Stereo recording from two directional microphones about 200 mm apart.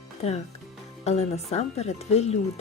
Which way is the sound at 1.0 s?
30° left (ahead or behind).